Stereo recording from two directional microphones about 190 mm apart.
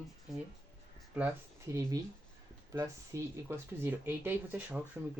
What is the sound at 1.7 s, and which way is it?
Speech, 15° right (ahead or behind).